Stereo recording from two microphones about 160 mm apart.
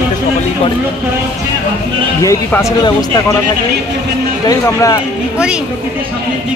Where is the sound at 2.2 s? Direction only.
20° left (ahead or behind).